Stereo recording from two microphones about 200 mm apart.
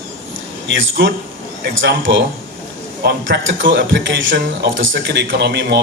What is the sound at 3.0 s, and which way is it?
A man's voice, 55° right (ahead or behind).